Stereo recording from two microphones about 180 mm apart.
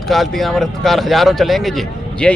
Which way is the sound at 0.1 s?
Centre (ahead or behind).